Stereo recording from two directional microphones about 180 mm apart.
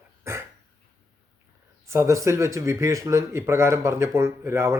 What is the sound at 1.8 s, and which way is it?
A man's voice, 15° right (ahead or behind).